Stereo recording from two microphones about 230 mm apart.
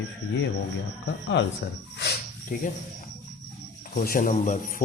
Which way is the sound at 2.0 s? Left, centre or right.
Left.